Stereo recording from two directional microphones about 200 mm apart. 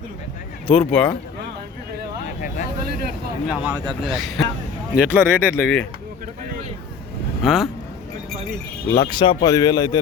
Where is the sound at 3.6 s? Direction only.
5° right (ahead or behind).